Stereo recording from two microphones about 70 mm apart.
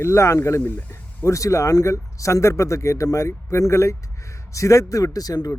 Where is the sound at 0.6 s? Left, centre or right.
Left.